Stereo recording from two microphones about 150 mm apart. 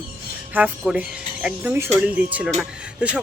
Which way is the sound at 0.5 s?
10° right (ahead or behind).